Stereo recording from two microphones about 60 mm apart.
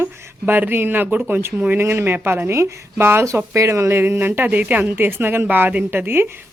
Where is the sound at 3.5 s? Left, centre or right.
Right.